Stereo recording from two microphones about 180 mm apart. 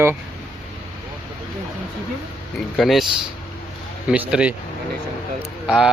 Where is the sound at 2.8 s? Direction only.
Centre (ahead or behind).